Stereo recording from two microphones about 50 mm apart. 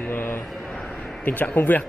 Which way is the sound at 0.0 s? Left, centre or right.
Left.